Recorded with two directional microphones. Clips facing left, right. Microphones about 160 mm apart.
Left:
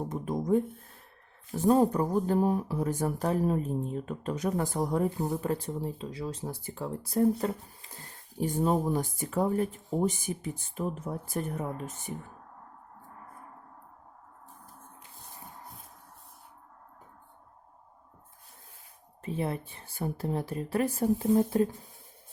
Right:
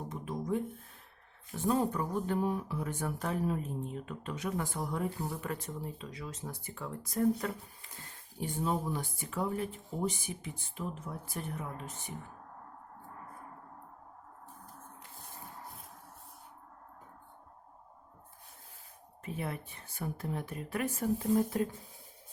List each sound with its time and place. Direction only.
0.1 s a sound: 45° left (ahead or behind)
1.5 s speech: 40° left (ahead or behind)
8.4 s speech: 40° left (ahead or behind)
19.2 s speech: 30° left (ahead or behind)